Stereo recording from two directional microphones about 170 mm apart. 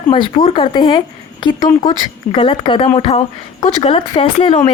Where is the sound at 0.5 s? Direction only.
30° left (ahead or behind).